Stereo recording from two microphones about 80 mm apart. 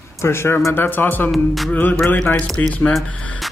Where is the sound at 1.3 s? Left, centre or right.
Centre.